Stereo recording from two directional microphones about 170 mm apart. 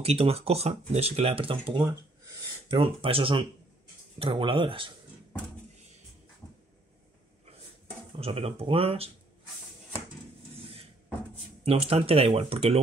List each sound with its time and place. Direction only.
0.0 s speech: 35° right (ahead or behind)
8.2 s speech: 35° right (ahead or behind)
11.6 s speech: 35° right (ahead or behind)